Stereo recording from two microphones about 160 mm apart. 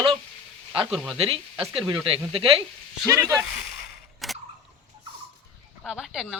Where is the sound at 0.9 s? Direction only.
Centre (ahead or behind).